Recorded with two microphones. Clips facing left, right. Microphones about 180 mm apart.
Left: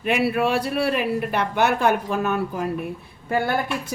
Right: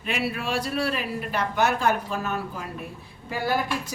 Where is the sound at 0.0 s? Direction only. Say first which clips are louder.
Left 8 dB; 60° left (ahead or behind).